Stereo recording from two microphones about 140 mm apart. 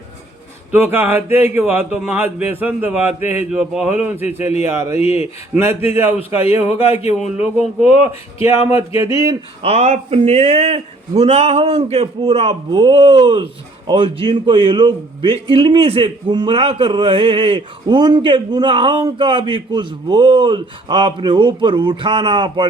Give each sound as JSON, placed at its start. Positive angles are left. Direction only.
{"t": 0.7, "sound": "speech", "side_deg": -15}
{"t": 8.4, "sound": "speech", "side_deg": -20}
{"t": 9.6, "sound": "speech", "side_deg": -50}
{"t": 12.7, "sound": "speech", "side_deg": -30}